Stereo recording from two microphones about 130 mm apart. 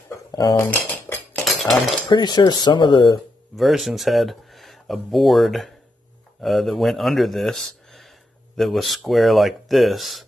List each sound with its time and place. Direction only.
0.1 s cutlery: 30° left (ahead or behind)
0.6 s cutlery: 20° left (ahead or behind)
1.4 s cutlery: centre (ahead or behind)
2.0 s speech: 35° left (ahead or behind)
3.5 s speech: centre (ahead or behind)